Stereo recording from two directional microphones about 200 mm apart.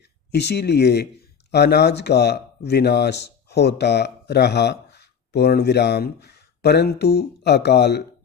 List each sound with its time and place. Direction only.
0.3 s speech: 55° left (ahead or behind)